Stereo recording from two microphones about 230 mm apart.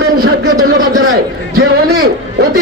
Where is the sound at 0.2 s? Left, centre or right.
Right.